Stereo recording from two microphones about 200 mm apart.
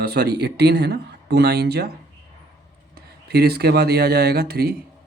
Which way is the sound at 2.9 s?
55° right (ahead or behind).